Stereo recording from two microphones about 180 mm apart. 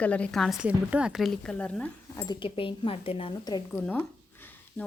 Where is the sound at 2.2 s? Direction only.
30° left (ahead or behind).